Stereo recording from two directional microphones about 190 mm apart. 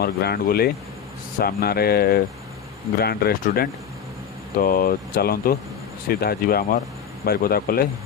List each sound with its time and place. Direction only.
0.0 s speech: 55° left (ahead or behind)